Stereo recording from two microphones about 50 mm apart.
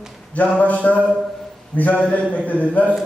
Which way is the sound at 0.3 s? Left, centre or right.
Left.